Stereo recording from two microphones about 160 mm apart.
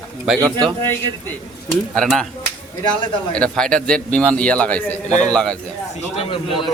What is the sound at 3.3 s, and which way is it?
A man's voice, 5° left (ahead or behind).